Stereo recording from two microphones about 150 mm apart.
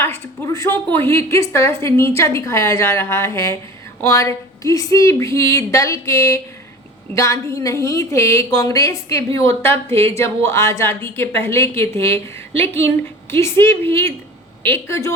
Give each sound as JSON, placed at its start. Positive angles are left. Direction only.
{"t": 0.0, "sound": "a woman's voice", "side_deg": 15}